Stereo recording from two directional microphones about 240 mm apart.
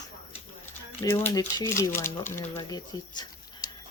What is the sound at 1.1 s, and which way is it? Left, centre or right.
Speech, centre.